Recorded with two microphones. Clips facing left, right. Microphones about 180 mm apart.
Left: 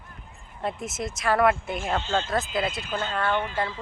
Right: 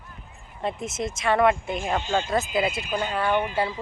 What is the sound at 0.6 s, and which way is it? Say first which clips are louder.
Speech: right 2 dB; centre (ahead or behind).